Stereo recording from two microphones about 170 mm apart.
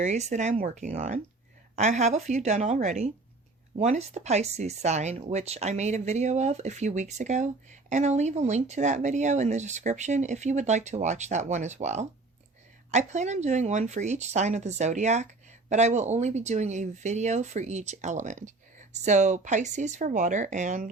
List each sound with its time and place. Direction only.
0.0 s speech: 40° right (ahead or behind)